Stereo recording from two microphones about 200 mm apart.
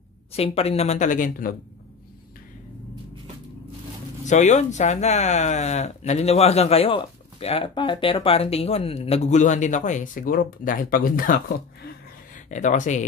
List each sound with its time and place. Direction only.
0.3 s speech: 30° left (ahead or behind)
4.2 s speech: 35° left (ahead or behind)